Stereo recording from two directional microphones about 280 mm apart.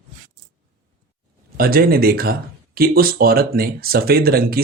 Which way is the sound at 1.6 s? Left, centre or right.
Right.